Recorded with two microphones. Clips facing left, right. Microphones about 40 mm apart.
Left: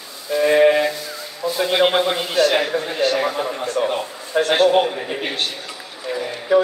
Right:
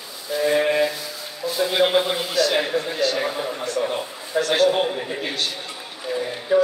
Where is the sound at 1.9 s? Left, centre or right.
Centre.